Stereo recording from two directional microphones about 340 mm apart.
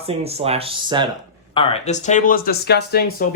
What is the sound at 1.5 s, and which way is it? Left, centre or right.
Speech, centre.